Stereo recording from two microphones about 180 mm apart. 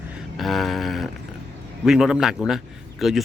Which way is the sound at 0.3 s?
Centre (ahead or behind).